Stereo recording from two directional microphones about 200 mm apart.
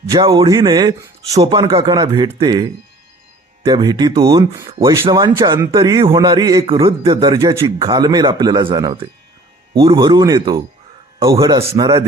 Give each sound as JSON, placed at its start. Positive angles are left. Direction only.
{"t": 0.1, "sound": "speech", "side_deg": -20}